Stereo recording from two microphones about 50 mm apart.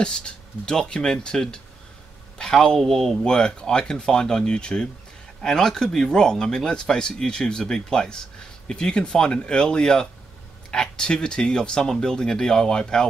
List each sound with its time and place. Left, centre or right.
0.0 s speech: centre